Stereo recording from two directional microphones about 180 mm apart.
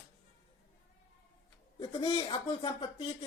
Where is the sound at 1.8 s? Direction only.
25° left (ahead or behind).